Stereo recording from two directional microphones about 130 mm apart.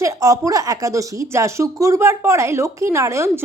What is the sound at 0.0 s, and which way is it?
Speech, 25° right (ahead or behind).